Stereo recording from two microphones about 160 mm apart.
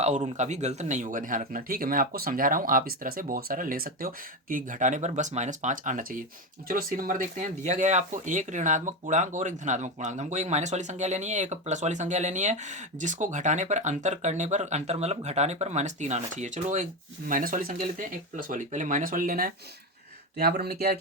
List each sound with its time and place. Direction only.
0.0 s speech: 50° right (ahead or behind)
20.4 s speech: 80° right